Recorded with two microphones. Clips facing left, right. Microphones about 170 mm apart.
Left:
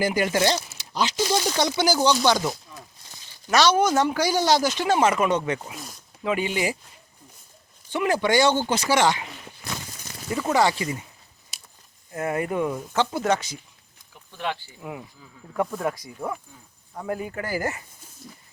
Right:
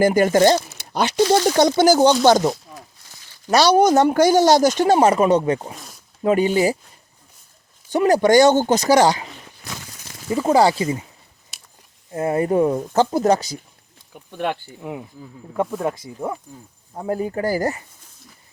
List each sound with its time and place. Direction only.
0.0 s speech: 45° right (ahead or behind)
3.5 s speech: 35° right (ahead or behind)
7.9 s speech: 40° right (ahead or behind)
10.2 s speech: 25° right (ahead or behind)
11.5 s a sound: centre (ahead or behind)
12.1 s speech: 30° right (ahead or behind)
14.3 s speech: 50° right (ahead or behind)
14.8 s speech: 20° right (ahead or behind); by 17.8 s 35° right (ahead or behind)